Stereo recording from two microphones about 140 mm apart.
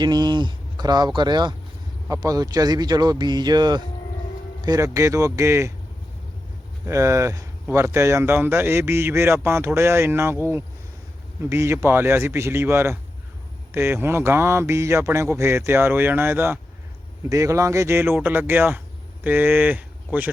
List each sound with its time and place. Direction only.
0.0 s speech: 30° right (ahead or behind)
6.8 s speech: 20° right (ahead or behind)